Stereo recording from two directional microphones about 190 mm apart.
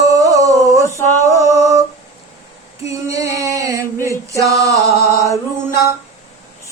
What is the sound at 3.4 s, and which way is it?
Male singing, 15° right (ahead or behind).